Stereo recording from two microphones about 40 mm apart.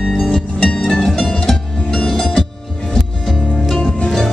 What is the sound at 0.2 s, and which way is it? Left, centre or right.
Music, centre.